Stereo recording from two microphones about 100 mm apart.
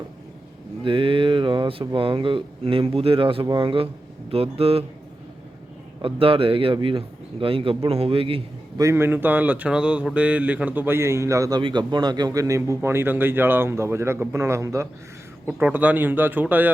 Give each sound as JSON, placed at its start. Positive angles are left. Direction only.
{"t": 0.9, "sound": "speech", "side_deg": -60}
{"t": 4.3, "sound": "speech", "side_deg": -75}
{"t": 6.0, "sound": "speech", "side_deg": -65}
{"t": 8.8, "sound": "speech", "side_deg": -25}
{"t": 11.6, "sound": "speech", "side_deg": -50}
{"t": 15.7, "sound": "speech", "side_deg": -15}